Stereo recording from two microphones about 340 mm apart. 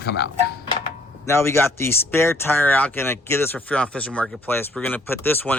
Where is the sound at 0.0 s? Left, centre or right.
Left.